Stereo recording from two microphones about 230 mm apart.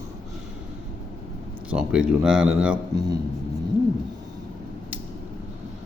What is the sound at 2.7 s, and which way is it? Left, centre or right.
Speech, centre.